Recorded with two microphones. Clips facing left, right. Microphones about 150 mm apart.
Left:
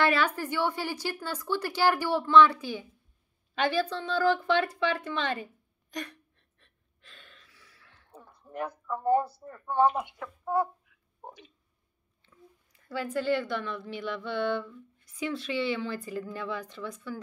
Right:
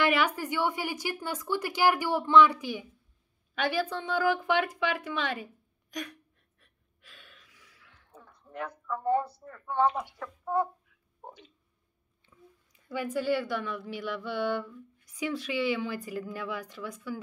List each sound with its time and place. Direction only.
0.0 s speech: 15° right (ahead or behind)
3.6 s a sound: 10° right (ahead or behind)
8.5 s speech: 25° left (ahead or behind)
10.1 s speech: 5° left (ahead or behind)
11.2 s squish: 15° left (ahead or behind)
12.8 s speech: 15° right (ahead or behind)